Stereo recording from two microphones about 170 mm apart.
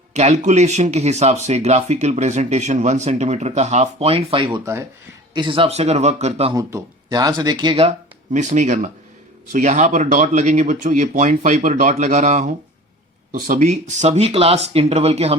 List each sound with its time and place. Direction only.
0.1 s speech: 40° right (ahead or behind)
6.5 s speech: 20° right (ahead or behind); by 15.4 s 40° right (ahead or behind)